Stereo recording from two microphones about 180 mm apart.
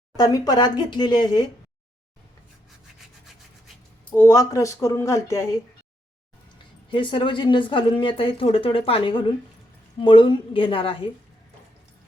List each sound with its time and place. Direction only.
0.2 s speech: 20° left (ahead or behind)
4.1 s speech: 15° left (ahead or behind)
6.9 s speech: 30° left (ahead or behind)